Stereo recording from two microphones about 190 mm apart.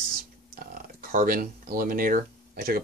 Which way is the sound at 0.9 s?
50° right (ahead or behind).